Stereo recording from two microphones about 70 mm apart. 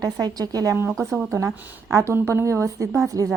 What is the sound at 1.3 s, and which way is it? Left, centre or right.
Speech, right.